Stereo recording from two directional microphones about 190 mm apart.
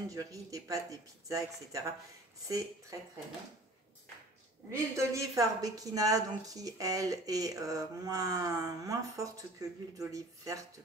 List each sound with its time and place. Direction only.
0.1 s speech: 15° right (ahead or behind)
4.6 s a woman's voice: 15° right (ahead or behind)